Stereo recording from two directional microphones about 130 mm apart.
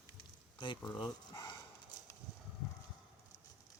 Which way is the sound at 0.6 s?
40° left (ahead or behind).